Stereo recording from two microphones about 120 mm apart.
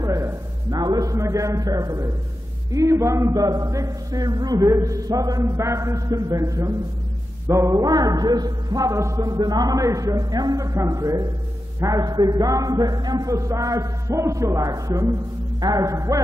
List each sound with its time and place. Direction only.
0.0 s a man's voice: 25° right (ahead or behind)